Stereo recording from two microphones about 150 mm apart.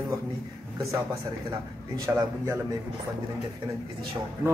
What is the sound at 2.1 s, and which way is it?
Speech, 15° right (ahead or behind).